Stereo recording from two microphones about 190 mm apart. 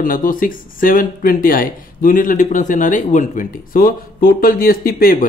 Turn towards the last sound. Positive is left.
turn(degrees=50)  # may be behind; listen again after turning